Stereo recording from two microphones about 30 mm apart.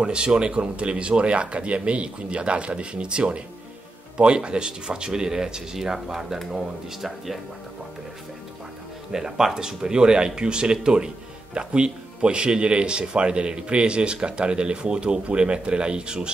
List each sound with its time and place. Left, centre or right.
0.0 s speech: right; by 7.3 s centre
9.1 s speech: centre